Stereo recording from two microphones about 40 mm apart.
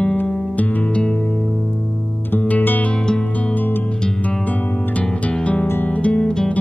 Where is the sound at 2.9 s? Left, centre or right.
Left.